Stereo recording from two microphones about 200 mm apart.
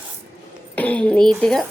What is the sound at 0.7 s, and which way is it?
Speech, 10° left (ahead or behind).